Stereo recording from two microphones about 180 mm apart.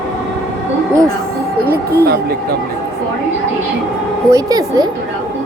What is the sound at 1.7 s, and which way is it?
Speech, 60° right (ahead or behind).